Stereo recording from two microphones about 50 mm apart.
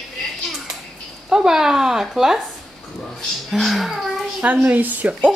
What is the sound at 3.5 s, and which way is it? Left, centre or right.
Speech, centre.